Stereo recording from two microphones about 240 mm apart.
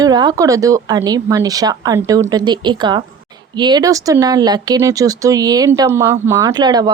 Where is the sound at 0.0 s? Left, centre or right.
Centre.